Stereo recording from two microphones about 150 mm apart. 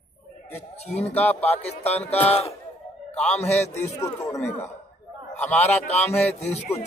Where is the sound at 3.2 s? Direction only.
50° left (ahead or behind).